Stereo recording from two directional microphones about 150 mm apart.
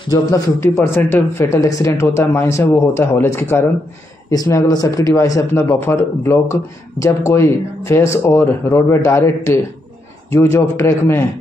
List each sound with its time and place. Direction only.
0.1 s speech: 20° left (ahead or behind)